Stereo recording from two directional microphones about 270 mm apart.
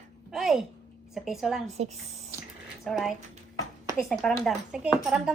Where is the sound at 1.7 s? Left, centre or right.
Right.